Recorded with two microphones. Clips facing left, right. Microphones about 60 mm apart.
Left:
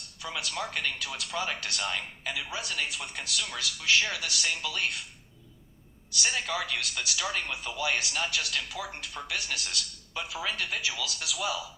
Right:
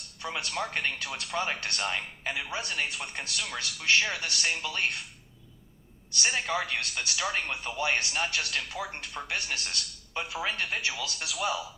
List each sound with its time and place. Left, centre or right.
0.2 s speech: right
6.2 s speech: right